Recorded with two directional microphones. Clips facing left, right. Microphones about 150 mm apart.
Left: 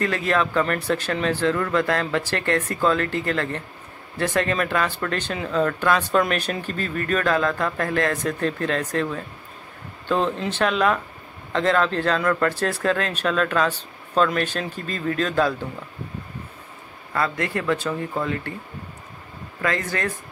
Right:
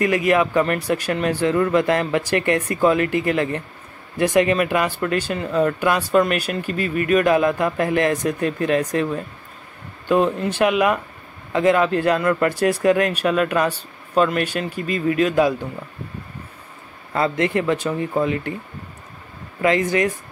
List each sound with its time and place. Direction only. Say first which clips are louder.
0.0 s speech: right 5 dB; 15° right (ahead or behind)
17.1 s speech: right 5 dB; 20° right (ahead or behind)
19.6 s speech: right 7 dB; 20° right (ahead or behind)